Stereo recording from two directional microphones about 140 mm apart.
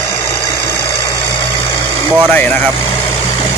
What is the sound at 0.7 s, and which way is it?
Vehicle, 20° left (ahead or behind).